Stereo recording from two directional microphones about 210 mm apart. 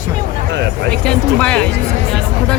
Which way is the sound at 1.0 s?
5° left (ahead or behind).